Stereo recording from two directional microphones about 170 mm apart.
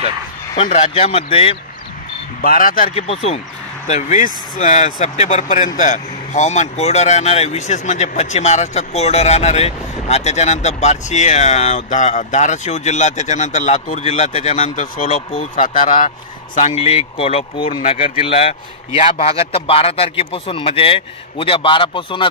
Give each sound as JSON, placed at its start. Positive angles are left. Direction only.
{"t": 0.7, "sound": "a man's voice", "side_deg": 40}
{"t": 2.4, "sound": "speech", "side_deg": 55}
{"t": 3.0, "sound": "a man's voice", "side_deg": 35}
{"t": 16.6, "sound": "a man's voice", "side_deg": 35}